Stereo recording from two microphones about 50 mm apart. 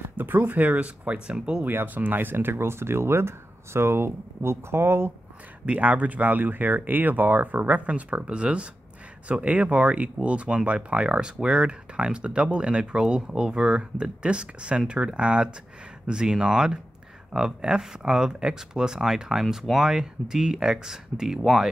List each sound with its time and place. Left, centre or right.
0.1 s speech: right
1.7 s speech: right
5.7 s speech: right; by 21.4 s centre
21.4 s speech: centre